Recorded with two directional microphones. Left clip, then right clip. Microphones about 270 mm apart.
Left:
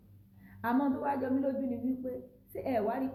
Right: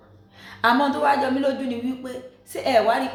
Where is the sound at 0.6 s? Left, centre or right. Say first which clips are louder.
Right 13 dB; centre.